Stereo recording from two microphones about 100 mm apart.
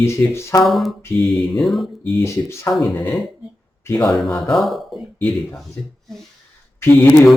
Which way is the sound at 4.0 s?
5° left (ahead or behind).